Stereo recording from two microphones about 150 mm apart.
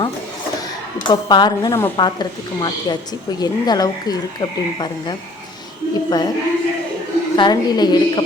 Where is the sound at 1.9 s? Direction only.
30° left (ahead or behind).